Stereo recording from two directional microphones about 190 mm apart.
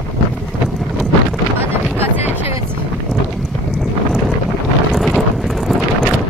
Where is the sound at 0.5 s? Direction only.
Centre (ahead or behind).